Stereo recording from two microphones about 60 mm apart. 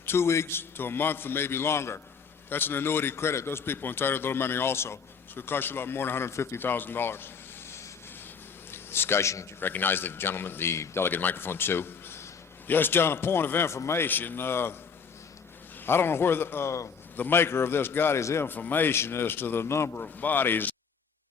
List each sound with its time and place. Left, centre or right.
0.0 s a man's voice: left
2.5 s a man's voice: left
8.7 s a man's voice: left
9.6 s a man's voice: left
15.9 s a man's voice: left
18.2 s speech: left
18.4 s a man's voice: left
20.0 s a man's voice: left